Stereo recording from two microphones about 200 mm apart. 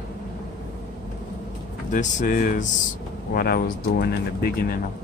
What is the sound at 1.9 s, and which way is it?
Speech, 40° left (ahead or behind).